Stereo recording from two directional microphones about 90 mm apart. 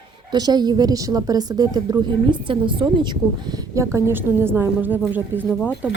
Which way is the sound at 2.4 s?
70° right (ahead or behind).